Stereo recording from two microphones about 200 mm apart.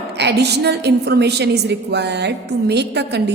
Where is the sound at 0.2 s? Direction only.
55° right (ahead or behind).